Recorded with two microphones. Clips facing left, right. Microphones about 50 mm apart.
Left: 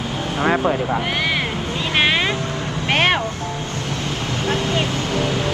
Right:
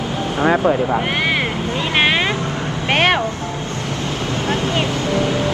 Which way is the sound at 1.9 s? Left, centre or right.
Right.